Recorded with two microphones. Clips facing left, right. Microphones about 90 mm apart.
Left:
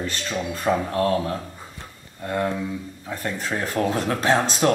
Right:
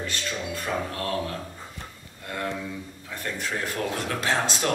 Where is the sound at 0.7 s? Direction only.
50° left (ahead or behind).